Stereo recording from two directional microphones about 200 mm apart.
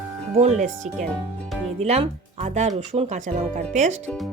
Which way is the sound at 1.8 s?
35° right (ahead or behind).